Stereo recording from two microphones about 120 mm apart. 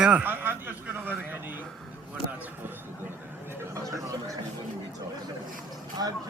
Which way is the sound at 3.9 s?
25° right (ahead or behind).